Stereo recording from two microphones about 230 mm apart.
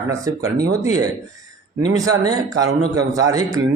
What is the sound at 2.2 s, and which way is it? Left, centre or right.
Speech, centre.